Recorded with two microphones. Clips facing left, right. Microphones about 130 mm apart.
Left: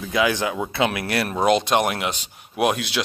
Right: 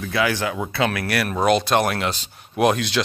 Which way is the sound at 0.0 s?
20° left (ahead or behind).